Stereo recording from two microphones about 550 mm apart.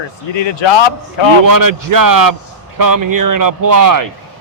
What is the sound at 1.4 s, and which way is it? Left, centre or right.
Speech, right.